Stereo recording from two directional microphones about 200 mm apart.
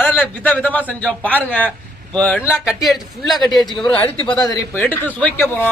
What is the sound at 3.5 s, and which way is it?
Speech, 20° left (ahead or behind).